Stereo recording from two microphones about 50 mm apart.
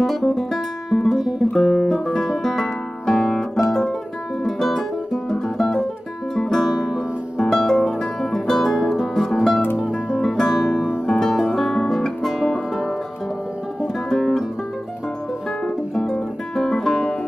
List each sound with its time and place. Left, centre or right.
0.0 s music: centre
1.6 s guitar: centre
2.1 s music: centre
4.5 s music: centre
10.7 s music: centre
11.1 s music: centre
12.2 s music: centre
14.0 s music: centre
16.0 s guitar: centre